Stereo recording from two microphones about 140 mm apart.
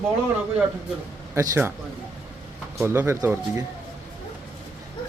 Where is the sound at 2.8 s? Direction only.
20° right (ahead or behind).